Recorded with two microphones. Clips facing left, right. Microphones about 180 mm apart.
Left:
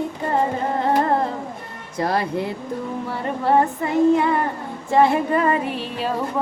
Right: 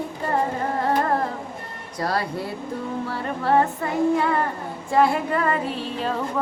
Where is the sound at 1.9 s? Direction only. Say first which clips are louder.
Left 4 dB; 20° left (ahead or behind).